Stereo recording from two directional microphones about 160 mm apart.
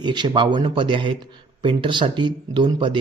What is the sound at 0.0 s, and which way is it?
A man's voice, 30° right (ahead or behind).